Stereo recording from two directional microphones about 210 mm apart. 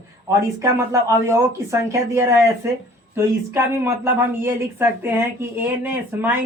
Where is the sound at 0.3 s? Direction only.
15° right (ahead or behind).